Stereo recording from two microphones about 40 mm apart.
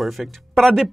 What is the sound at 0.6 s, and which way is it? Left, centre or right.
Speech, centre.